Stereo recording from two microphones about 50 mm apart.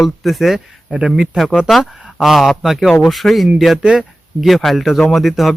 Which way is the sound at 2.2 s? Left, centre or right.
Centre.